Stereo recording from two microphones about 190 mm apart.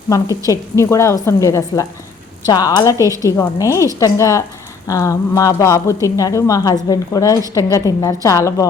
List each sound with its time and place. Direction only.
0.8 s a woman's voice: 15° left (ahead or behind)
3.0 s a woman's voice: 15° right (ahead or behind)
3.3 s a woman's voice: 15° left (ahead or behind)